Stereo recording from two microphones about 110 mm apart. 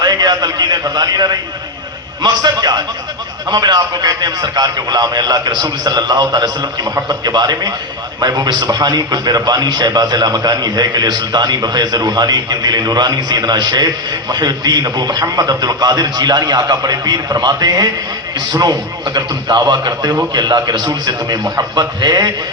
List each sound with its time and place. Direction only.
0.0 s a man's voice: 35° right (ahead or behind)